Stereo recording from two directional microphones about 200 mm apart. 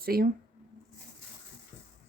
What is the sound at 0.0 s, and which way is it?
Speech, 50° right (ahead or behind).